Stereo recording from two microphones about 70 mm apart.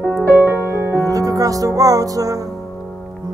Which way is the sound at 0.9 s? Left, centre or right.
Right.